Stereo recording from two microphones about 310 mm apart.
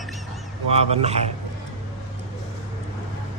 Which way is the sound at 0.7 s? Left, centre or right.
Centre.